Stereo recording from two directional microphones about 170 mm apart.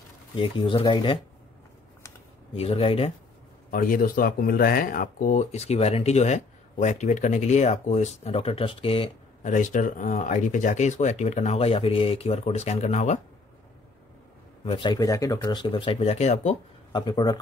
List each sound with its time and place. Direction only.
0.4 s speech: 30° left (ahead or behind)
2.5 s speech: 35° left (ahead or behind)
3.7 s speech: 55° left (ahead or behind); by 9.1 s 30° left (ahead or behind)
9.4 s speech: 45° left (ahead or behind)
14.6 s speech: 30° left (ahead or behind)
16.9 s speech: 25° left (ahead or behind)